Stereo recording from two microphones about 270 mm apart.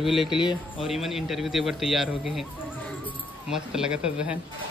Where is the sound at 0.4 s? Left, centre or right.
Centre.